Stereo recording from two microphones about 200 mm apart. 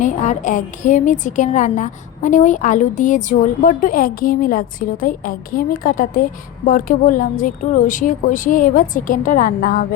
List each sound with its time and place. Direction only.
0.0 s a woman's voice: 40° left (ahead or behind)